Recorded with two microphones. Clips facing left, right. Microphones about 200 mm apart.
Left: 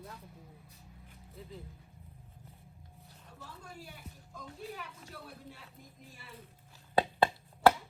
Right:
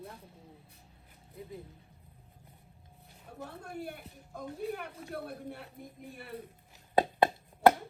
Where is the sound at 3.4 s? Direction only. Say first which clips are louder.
Right 9 dB; 60° right (ahead or behind).